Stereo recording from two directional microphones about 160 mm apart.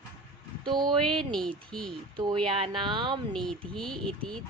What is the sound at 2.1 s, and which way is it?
A woman's voice, 30° right (ahead or behind).